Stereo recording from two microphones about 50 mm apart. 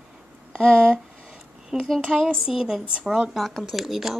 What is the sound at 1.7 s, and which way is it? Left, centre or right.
Speech, centre.